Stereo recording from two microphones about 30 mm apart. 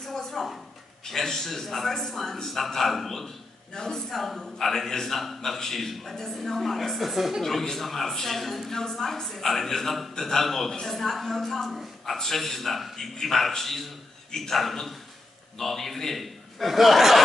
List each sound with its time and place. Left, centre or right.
0.0 s a sound: centre
1.0 s a man's voice: centre
3.7 s a man's voice: left
4.1 s a man's voice: centre
7.8 s a man's voice: centre
14.3 s a man's voice: centre
14.6 s a man's voice: centre